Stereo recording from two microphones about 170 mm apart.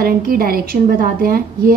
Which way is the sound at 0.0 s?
60° right (ahead or behind).